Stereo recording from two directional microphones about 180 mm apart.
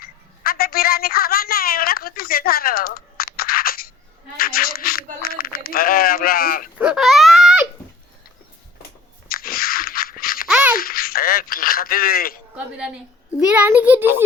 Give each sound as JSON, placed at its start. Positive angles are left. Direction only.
{"t": 0.0, "sound": "a sound", "side_deg": 55}
{"t": 6.7, "sound": "baby cry", "side_deg": -5}
{"t": 9.3, "sound": "crunch", "side_deg": 55}
{"t": 10.5, "sound": "toothbrush", "side_deg": -10}
{"t": 10.8, "sound": "a sound", "side_deg": 55}
{"t": 12.5, "sound": "a child's voice", "side_deg": -5}